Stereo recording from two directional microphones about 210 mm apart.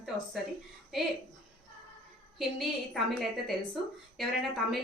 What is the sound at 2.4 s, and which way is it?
Speech, centre (ahead or behind).